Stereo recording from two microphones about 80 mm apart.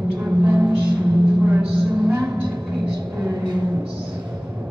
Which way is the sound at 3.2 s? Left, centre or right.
Right.